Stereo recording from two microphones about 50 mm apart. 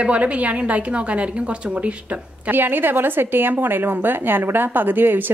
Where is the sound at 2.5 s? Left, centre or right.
Right.